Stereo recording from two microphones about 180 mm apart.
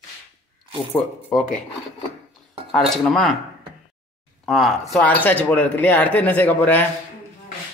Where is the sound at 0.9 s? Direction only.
5° left (ahead or behind).